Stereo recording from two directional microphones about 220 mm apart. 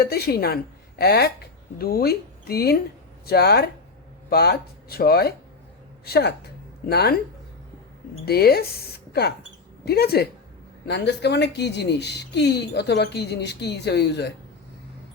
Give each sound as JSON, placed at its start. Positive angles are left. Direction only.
{"t": 0.0, "sound": "speech", "side_deg": 45}
{"t": 8.2, "sound": "speech", "side_deg": 45}
{"t": 9.8, "sound": "speech", "side_deg": 45}